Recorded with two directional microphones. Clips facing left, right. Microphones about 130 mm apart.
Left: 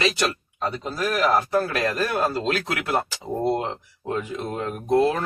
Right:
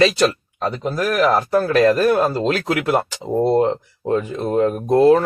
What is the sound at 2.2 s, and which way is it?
Speech, 35° right (ahead or behind).